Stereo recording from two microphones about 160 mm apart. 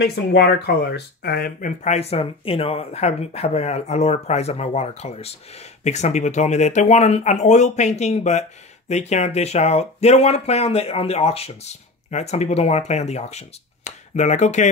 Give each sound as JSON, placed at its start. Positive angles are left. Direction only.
{"t": 0.0, "sound": "speech", "side_deg": 90}
{"t": 1.8, "sound": "speech", "side_deg": 45}